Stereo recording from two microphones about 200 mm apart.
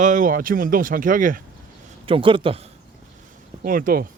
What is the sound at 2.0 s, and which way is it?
Speech, 25° right (ahead or behind).